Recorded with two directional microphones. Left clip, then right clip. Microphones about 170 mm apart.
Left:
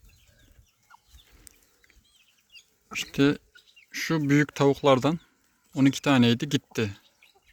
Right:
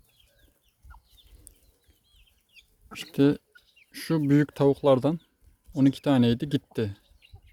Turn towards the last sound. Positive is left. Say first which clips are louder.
# left 1 dB
turn(degrees=-10)  # may be behind; listen again after turning